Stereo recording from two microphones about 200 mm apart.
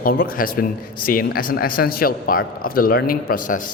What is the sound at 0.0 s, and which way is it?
Speech, 45° left (ahead or behind).